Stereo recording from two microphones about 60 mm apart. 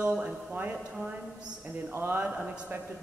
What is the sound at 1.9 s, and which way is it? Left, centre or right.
Speech, right.